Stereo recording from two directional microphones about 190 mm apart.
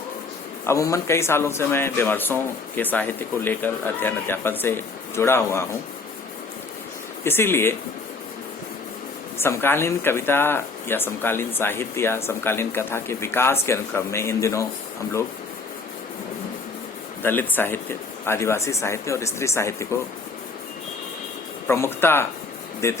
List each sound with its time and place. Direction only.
0.6 s speech: 15° left (ahead or behind)
7.3 s speech: 10° left (ahead or behind)
9.4 s speech: 10° left (ahead or behind)
17.2 s speech: 10° left (ahead or behind)
21.7 s speech: 10° left (ahead or behind)